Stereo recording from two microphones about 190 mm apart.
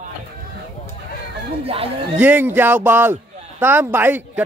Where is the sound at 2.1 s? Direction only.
10° right (ahead or behind).